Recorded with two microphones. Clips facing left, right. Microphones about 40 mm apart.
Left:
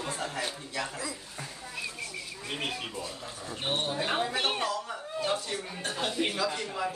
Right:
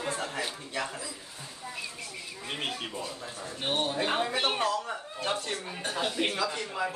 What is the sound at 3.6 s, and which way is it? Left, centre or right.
Speech, right.